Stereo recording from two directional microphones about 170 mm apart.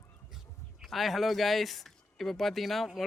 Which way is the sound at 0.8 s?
Centre (ahead or behind).